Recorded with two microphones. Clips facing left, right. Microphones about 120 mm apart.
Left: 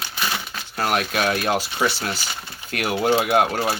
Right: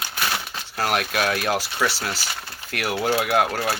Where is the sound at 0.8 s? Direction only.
25° left (ahead or behind).